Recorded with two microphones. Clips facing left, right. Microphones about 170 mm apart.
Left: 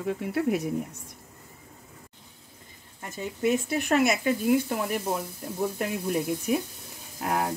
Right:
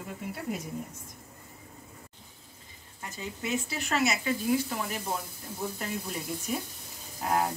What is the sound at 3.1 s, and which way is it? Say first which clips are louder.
Speech: left 7 dB; 55° left (ahead or behind).